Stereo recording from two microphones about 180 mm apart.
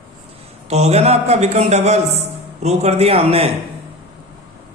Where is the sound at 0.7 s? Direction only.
35° right (ahead or behind).